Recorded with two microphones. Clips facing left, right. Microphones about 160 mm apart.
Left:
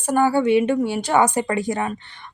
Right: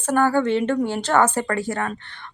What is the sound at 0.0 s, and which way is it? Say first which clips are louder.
Speech: left 1 dB; 10° left (ahead or behind).